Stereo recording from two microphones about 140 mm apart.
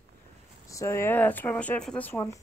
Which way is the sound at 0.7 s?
20° left (ahead or behind).